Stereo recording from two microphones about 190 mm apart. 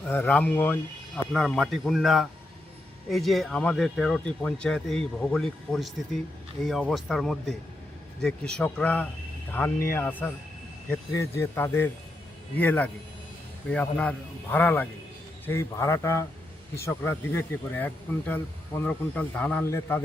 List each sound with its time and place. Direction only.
0.0 s speech: 10° left (ahead or behind)